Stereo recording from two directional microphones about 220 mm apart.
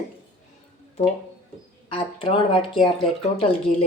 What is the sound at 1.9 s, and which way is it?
Speech, 25° left (ahead or behind).